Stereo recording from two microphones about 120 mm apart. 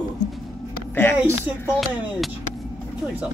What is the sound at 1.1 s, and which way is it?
Speech, 20° right (ahead or behind).